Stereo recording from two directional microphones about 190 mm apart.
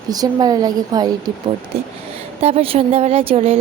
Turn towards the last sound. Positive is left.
turn(degrees=-35)  # may be behind; listen again after turning